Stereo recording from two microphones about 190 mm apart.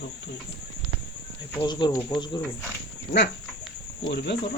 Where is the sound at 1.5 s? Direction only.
25° left (ahead or behind).